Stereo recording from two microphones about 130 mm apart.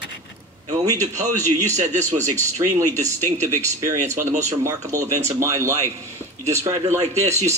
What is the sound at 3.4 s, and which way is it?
Speech, 25° right (ahead or behind).